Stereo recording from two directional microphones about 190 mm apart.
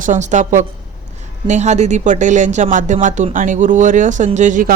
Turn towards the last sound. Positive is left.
turn(degrees=-40)  # may be behind; listen again after turning